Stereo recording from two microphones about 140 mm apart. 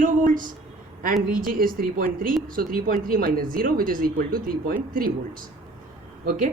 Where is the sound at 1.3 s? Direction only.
90° right.